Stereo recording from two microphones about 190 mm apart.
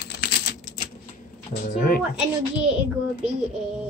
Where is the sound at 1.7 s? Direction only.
50° left (ahead or behind).